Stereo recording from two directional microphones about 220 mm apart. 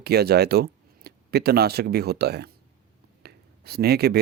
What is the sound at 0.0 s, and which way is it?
Speech, 45° right (ahead or behind).